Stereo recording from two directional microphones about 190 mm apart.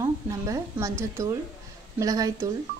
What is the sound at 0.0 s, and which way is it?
A woman's voice, 15° right (ahead or behind).